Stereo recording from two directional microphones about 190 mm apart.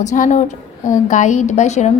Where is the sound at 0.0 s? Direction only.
40° left (ahead or behind).